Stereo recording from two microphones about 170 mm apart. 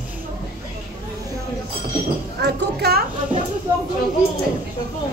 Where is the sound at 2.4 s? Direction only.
75° right (ahead or behind).